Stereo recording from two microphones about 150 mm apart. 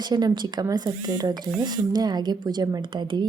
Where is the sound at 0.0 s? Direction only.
25° right (ahead or behind).